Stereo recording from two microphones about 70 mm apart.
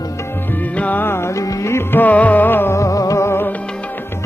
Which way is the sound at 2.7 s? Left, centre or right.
Left.